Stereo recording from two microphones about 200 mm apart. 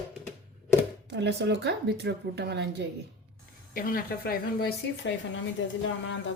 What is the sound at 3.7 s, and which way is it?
A woman's voice, 45° left (ahead or behind).